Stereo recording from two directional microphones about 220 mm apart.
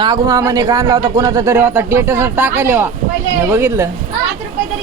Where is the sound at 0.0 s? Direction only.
15° right (ahead or behind).